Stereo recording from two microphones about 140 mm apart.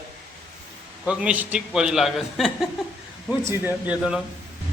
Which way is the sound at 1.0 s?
10° right (ahead or behind).